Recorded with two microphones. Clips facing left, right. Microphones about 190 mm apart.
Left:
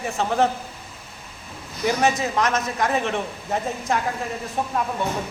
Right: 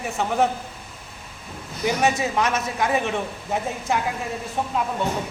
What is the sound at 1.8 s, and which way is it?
A man's voice, 10° right (ahead or behind).